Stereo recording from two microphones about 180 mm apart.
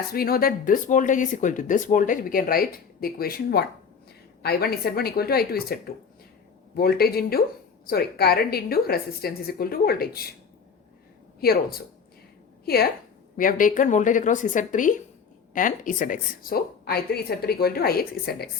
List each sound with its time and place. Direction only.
0.1 s a woman's voice: 55° left (ahead or behind)
12.6 s a woman's voice: 60° left (ahead or behind)
13.3 s a woman's voice: 50° left (ahead or behind)